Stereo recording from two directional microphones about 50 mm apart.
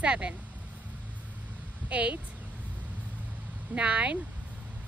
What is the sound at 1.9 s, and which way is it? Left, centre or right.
Speech, right.